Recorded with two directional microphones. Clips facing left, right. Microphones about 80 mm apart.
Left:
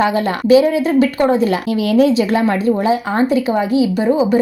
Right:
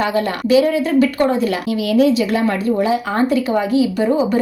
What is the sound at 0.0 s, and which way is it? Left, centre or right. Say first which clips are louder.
Speech: left 2 dB; left.